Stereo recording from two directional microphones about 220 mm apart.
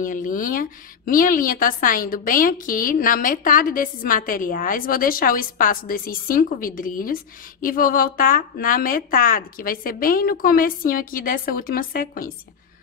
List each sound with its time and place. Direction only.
0.0 s a woman's voice: 40° left (ahead or behind)